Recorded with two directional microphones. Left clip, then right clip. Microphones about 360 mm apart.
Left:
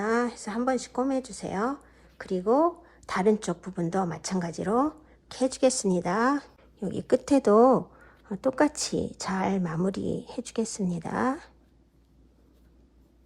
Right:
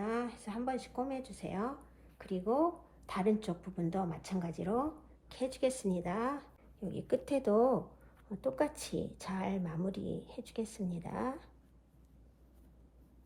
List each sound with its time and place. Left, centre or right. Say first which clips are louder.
0.0 s a woman's voice: left 11 dB; left